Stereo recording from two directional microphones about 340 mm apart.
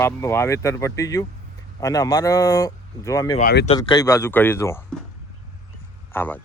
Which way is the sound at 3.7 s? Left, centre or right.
Centre.